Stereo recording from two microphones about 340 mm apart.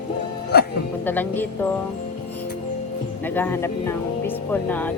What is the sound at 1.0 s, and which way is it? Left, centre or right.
Speech, centre.